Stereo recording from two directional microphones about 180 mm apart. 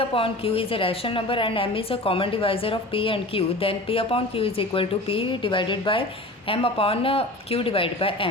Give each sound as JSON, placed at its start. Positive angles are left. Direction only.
{"t": 0.1, "sound": "a woman's voice", "side_deg": 30}